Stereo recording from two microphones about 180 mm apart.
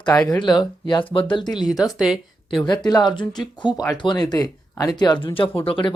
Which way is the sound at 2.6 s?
25° left (ahead or behind).